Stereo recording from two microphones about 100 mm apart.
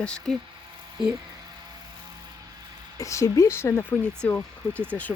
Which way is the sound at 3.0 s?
30° left (ahead or behind).